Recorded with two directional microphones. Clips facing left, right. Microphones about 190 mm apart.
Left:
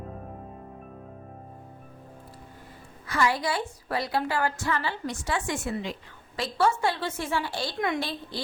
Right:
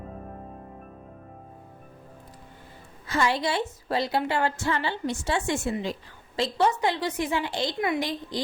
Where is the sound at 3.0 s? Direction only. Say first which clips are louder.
Right 1 dB; 25° right (ahead or behind).